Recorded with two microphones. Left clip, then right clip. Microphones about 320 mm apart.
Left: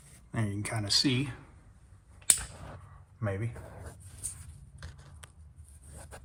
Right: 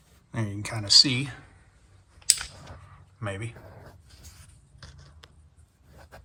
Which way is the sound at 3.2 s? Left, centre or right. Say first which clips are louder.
Right 1 dB; centre.